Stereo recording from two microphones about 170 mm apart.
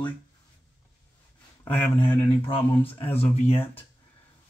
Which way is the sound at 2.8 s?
10° left (ahead or behind).